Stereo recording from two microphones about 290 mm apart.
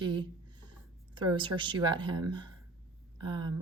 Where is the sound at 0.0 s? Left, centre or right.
Centre.